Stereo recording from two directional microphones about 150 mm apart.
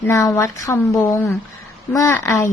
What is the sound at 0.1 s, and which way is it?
A woman's voice, 20° left (ahead or behind).